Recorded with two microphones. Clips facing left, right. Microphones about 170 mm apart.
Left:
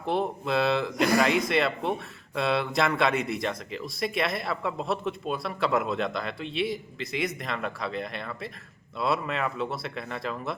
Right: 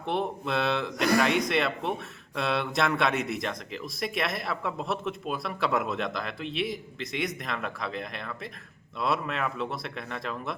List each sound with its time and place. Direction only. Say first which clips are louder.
0.0 s a man's voice: left 2 dB; centre (ahead or behind)